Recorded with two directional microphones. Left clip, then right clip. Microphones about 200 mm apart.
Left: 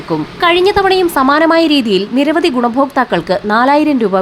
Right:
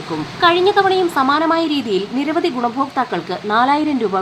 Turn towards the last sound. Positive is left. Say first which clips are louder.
# left 6 dB
turn(degrees=25)  # may be behind; listen again after turning